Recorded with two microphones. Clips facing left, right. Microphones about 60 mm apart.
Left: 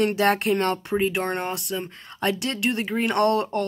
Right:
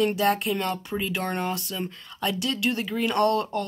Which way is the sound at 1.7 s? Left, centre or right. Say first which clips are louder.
Left 2 dB; left.